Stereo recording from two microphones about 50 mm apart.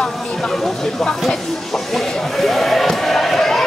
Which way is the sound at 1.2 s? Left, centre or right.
Centre.